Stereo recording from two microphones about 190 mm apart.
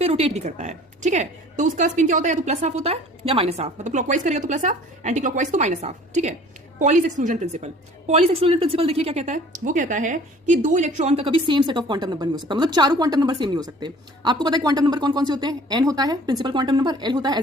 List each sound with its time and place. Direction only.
0.0 s a woman's voice: 35° right (ahead or behind)